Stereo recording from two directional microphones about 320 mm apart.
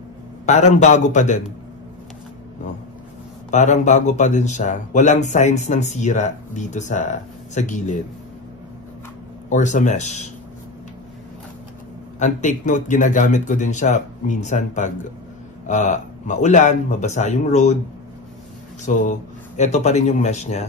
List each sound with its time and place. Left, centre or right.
0.7 s speech: left
3.4 s speech: left
9.5 s speech: left
12.2 s speech: left
18.9 s speech: left